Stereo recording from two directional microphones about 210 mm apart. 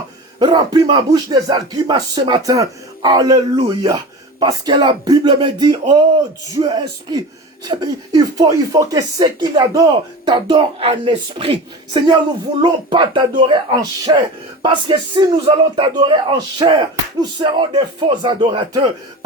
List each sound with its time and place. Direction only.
0.3 s speech: 20° right (ahead or behind)